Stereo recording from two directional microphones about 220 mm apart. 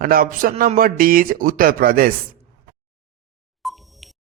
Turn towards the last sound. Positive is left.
turn(degrees=0)  # may be behind; listen again after turning